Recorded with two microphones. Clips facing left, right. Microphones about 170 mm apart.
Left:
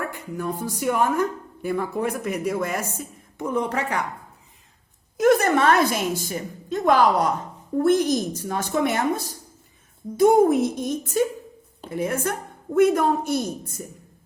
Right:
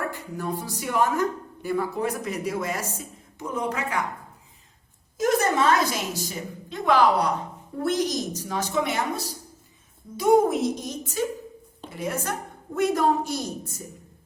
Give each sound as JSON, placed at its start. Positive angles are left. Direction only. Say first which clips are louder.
{"t": 0.1, "sound": "speech", "louder": "left 2 dB", "side_deg": 50}
{"t": 5.1, "sound": "a woman's voice", "louder": "left 4 dB", "side_deg": 60}